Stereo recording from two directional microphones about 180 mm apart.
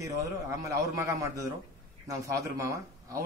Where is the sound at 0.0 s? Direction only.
15° right (ahead or behind).